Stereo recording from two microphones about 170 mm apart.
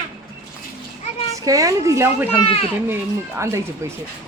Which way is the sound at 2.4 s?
35° left (ahead or behind).